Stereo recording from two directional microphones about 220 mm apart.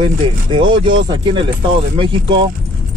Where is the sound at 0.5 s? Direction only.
20° right (ahead or behind).